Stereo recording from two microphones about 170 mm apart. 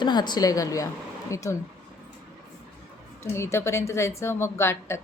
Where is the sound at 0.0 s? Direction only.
25° left (ahead or behind).